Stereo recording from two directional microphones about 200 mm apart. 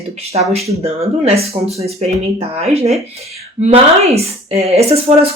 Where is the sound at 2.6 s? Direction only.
30° right (ahead or behind).